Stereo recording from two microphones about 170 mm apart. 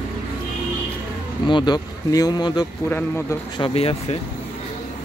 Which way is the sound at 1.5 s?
25° left (ahead or behind).